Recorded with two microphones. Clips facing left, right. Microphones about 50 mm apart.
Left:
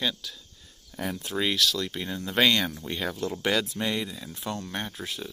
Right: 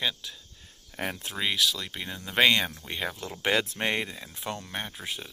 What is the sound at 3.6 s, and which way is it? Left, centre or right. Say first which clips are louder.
Speech: even; right.